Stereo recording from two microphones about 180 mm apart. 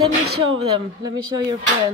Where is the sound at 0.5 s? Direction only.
25° right (ahead or behind).